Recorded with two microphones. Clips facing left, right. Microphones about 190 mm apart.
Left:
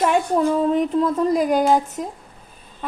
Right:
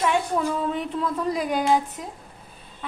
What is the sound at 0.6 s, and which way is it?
A woman's voice, 40° left (ahead or behind).